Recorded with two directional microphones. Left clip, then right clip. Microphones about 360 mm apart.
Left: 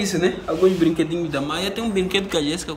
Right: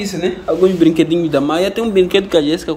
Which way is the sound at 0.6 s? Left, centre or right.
Right.